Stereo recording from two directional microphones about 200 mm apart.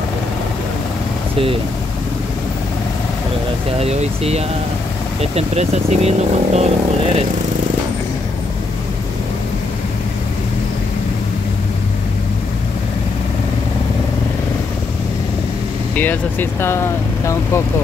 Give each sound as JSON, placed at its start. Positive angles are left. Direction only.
{"t": 3.8, "sound": "speech", "side_deg": -30}
{"t": 15.9, "sound": "speech", "side_deg": 10}